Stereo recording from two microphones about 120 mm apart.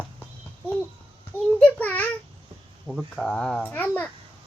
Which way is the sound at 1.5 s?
10° left (ahead or behind).